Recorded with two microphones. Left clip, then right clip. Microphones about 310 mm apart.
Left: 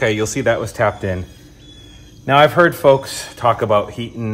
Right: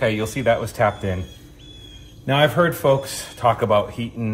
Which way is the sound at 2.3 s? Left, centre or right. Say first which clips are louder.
Left 6 dB; left.